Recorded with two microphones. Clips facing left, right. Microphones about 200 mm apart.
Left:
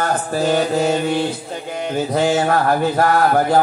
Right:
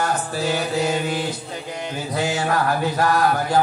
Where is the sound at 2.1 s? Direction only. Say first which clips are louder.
Left 5 dB; 45° left (ahead or behind).